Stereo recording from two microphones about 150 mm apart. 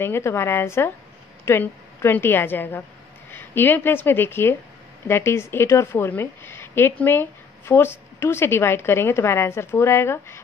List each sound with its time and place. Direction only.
0.0 s a woman's voice: 15° left (ahead or behind)